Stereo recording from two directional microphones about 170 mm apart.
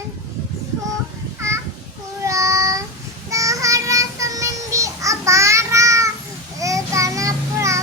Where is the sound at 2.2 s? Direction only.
20° right (ahead or behind).